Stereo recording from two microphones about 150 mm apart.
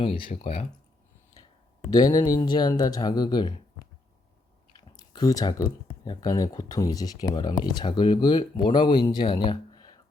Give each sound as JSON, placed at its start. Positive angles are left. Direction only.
{"t": 0.0, "sound": "speech", "side_deg": 35}
{"t": 1.9, "sound": "speech", "side_deg": 25}
{"t": 4.9, "sound": "speech", "side_deg": 25}